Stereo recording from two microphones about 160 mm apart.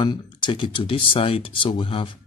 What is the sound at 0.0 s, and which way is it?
Speech, 30° left (ahead or behind).